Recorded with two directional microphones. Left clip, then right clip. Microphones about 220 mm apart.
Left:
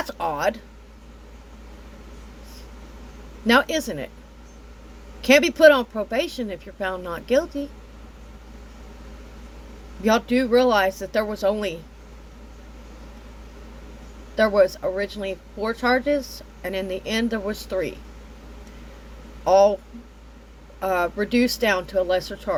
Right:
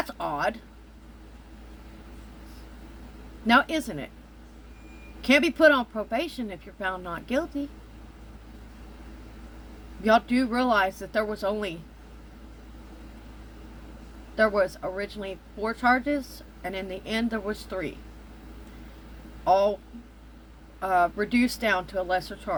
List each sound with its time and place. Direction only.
0.0 s speech: 15° left (ahead or behind)
3.4 s speech: 15° left (ahead or behind)
5.2 s speech: 15° left (ahead or behind)
10.0 s speech: 15° left (ahead or behind)
14.3 s speech: 15° left (ahead or behind)
19.5 s speech: 15° left (ahead or behind)
20.8 s speech: 15° left (ahead or behind)